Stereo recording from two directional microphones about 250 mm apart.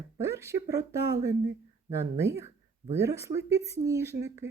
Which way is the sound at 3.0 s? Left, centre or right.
Centre.